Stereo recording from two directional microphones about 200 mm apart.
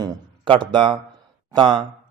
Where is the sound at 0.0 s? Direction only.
25° right (ahead or behind).